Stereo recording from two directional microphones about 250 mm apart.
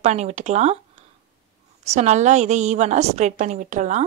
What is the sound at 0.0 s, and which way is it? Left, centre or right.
Speech, right.